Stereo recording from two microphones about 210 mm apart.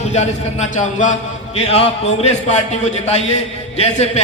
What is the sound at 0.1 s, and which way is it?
A man's voice, 35° left (ahead or behind).